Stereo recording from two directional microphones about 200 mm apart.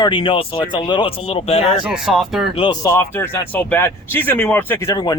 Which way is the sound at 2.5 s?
25° left (ahead or behind).